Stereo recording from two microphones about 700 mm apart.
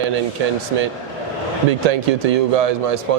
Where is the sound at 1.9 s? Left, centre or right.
Right.